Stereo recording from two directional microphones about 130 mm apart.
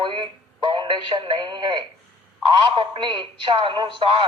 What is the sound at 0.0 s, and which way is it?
Speech, 40° right (ahead or behind).